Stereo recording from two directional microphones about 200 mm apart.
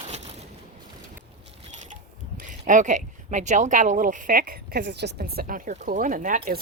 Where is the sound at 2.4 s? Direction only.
40° right (ahead or behind).